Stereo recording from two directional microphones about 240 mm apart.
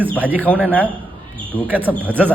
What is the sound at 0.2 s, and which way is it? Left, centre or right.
Speech, centre.